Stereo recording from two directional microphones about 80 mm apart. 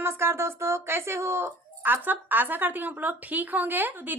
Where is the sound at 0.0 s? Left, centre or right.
Right.